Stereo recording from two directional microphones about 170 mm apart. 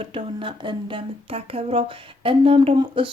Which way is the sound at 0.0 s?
30° right (ahead or behind).